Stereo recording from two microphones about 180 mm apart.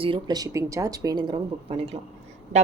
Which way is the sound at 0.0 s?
25° right (ahead or behind).